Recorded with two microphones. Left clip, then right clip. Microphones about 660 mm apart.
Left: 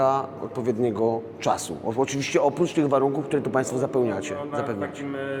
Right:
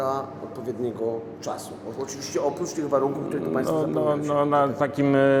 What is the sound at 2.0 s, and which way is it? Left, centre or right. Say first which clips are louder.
A man's voice: left 4 dB; left.